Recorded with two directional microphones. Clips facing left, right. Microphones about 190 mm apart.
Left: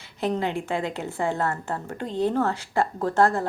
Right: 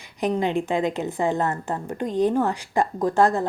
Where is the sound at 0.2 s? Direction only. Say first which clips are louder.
Right 3 dB; 15° right (ahead or behind).